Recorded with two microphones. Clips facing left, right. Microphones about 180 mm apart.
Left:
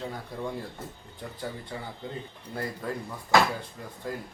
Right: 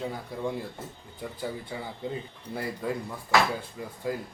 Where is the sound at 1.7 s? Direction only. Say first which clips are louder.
Right 1 dB; 5° right (ahead or behind).